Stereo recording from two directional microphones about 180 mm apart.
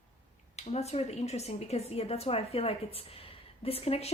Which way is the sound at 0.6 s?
35° left (ahead or behind).